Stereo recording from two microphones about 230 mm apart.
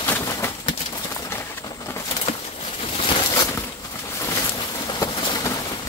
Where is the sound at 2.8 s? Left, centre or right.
Left.